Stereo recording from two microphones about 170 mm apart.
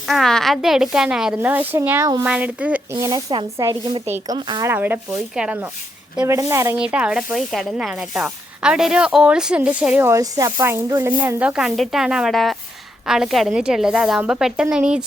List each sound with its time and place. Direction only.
0.0 s speech: centre (ahead or behind)
2.9 s speech: 20° right (ahead or behind)
4.7 s speech: 10° right (ahead or behind)
6.7 s speech: 5° right (ahead or behind)